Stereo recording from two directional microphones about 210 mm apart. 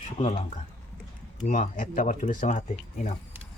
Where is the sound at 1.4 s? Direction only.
40° left (ahead or behind).